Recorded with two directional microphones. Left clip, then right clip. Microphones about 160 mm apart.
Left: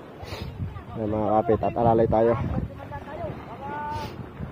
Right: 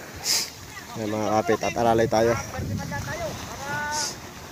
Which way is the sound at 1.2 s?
Centre (ahead or behind).